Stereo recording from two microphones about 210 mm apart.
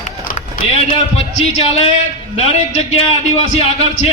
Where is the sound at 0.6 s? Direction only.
25° left (ahead or behind).